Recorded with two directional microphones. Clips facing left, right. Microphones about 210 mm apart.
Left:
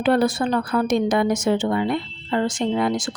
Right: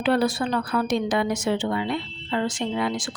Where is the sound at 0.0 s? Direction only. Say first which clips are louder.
Left 3 dB; 45° left (ahead or behind).